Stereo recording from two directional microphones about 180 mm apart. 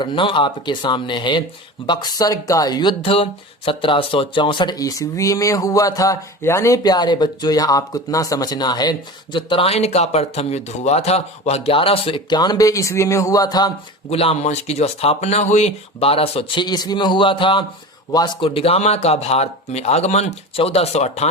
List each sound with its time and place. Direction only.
0.0 s speech: 30° left (ahead or behind)
14.1 s speech: 35° left (ahead or behind)